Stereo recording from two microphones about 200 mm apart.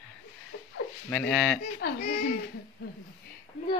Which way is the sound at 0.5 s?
75° left (ahead or behind).